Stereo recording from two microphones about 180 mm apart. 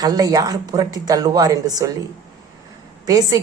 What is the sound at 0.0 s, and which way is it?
A woman's voice, 20° right (ahead or behind).